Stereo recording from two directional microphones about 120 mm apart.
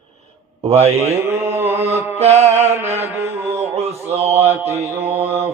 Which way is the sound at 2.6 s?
20° right (ahead or behind).